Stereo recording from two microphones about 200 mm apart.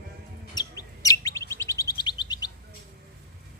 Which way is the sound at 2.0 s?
20° left (ahead or behind).